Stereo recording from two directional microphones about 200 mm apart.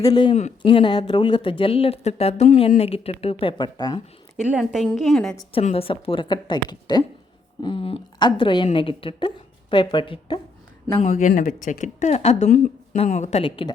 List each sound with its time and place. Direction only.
0.0 s speech: 20° left (ahead or behind)
4.4 s a woman's voice: 5° right (ahead or behind)
5.4 s speech: 30° left (ahead or behind)
11.0 s speech: 40° left (ahead or behind)